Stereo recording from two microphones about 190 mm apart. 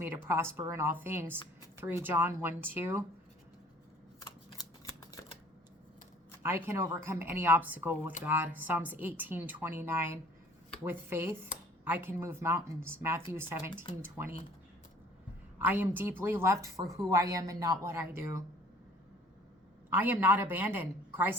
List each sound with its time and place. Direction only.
0.0 s speech: 10° right (ahead or behind)
4.2 s shuffling cards: 20° left (ahead or behind)
6.4 s speech: 15° right (ahead or behind)
15.5 s speech: 10° right (ahead or behind)
19.9 s speech: 10° right (ahead or behind)